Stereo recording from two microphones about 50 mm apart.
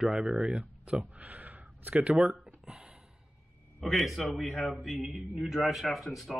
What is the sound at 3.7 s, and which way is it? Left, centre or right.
Speech, centre.